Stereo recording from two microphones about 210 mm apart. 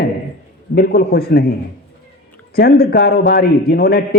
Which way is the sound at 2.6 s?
45° left (ahead or behind).